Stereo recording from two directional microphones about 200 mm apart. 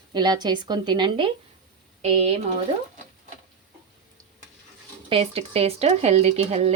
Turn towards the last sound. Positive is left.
turn(degrees=-30)  # may be behind; listen again after turning